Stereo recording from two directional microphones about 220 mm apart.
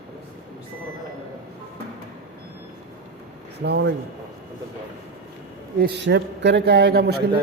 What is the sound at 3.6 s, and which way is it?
Speech, 50° right (ahead or behind).